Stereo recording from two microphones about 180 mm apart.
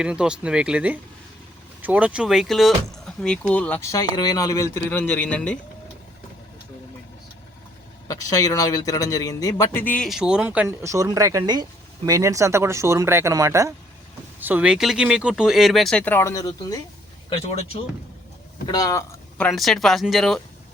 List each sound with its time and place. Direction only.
0.0 s a man's voice: 5° right (ahead or behind)
8.0 s a man's voice: 20° left (ahead or behind)
17.2 s speech: 30° left (ahead or behind)
18.7 s speech: 20° left (ahead or behind)
19.4 s speech: centre (ahead or behind)